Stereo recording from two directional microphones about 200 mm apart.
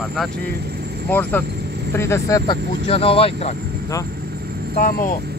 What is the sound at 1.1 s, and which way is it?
Speech, 10° left (ahead or behind).